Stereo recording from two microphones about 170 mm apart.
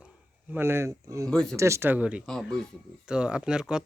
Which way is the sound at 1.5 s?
15° right (ahead or behind).